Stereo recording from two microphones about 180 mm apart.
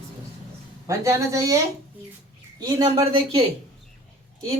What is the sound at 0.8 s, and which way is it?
Speech, 15° right (ahead or behind).